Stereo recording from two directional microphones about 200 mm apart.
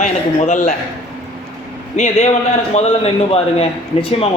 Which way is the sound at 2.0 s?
35° left (ahead or behind).